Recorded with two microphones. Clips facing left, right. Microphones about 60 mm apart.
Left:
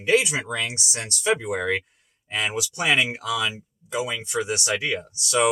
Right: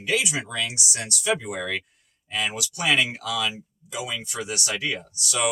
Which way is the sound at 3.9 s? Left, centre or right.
Left.